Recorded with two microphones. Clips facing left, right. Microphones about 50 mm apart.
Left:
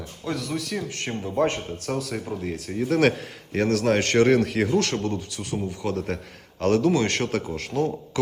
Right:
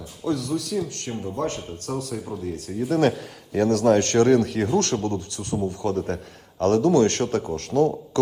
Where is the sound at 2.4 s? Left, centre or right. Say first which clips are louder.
Even; left.